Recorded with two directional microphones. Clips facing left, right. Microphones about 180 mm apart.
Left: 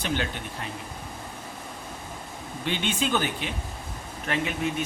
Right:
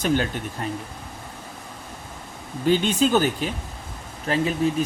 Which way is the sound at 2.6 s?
40° right (ahead or behind).